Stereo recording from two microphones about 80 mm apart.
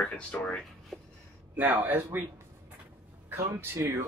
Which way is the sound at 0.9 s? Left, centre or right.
Centre.